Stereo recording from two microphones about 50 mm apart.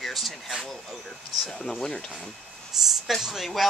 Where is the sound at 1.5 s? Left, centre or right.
Centre.